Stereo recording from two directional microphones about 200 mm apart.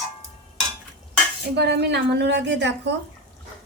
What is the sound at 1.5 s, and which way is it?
A woman's voice, 55° right (ahead or behind).